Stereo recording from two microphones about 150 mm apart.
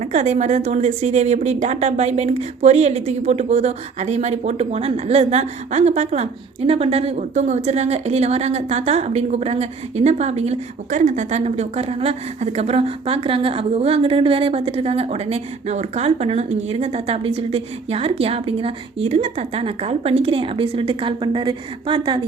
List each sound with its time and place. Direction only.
0.0 s speech: 50° right (ahead or behind); by 22.2 s 35° right (ahead or behind)